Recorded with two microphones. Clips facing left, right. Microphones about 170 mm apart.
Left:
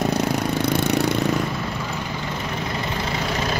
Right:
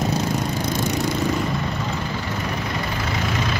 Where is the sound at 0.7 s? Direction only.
65° left (ahead or behind).